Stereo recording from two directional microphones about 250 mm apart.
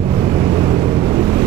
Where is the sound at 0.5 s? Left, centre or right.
Centre.